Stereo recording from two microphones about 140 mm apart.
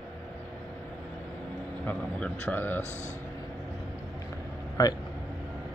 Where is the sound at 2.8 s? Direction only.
55° left (ahead or behind).